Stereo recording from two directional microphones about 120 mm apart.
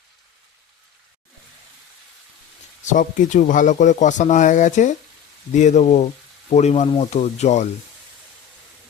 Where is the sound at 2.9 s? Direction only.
90° left; by 7.6 s 70° left (ahead or behind).